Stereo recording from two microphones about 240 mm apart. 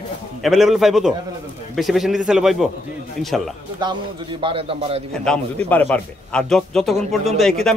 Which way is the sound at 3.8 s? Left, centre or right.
Centre.